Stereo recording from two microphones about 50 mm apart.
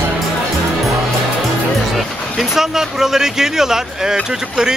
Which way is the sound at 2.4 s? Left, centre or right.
Centre.